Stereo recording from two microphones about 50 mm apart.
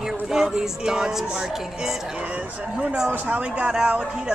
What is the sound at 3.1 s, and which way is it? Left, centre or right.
Speech, right.